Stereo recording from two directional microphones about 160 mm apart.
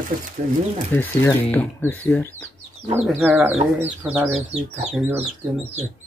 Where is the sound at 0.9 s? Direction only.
15° left (ahead or behind).